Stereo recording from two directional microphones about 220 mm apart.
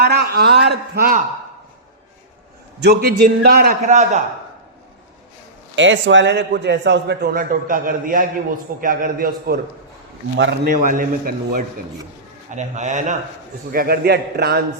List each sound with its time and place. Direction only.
0.0 s a man's voice: 45° right (ahead or behind)
2.8 s a man's voice: 45° right (ahead or behind)
5.7 s a man's voice: 55° right (ahead or behind); by 9.6 s 40° right (ahead or behind)
10.3 s a man's voice: 55° right (ahead or behind)
10.8 s a man's voice: 40° right (ahead or behind)